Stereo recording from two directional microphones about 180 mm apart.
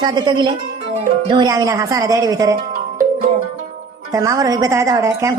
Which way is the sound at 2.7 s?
50° right (ahead or behind).